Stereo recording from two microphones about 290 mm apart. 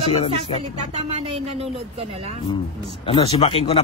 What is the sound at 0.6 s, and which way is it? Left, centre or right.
Speech, centre.